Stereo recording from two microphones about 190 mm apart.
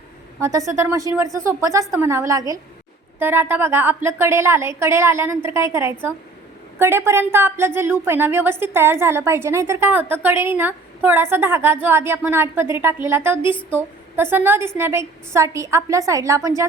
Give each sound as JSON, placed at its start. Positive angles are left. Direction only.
{"t": 0.3, "sound": "a woman's voice", "side_deg": -20}